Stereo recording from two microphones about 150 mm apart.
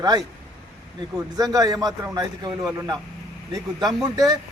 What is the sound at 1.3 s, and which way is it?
A man's voice, 25° right (ahead or behind).